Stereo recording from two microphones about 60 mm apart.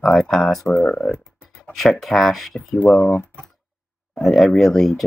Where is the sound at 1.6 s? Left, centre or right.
Centre.